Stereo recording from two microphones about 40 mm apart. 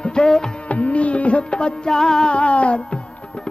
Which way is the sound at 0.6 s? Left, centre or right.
Left.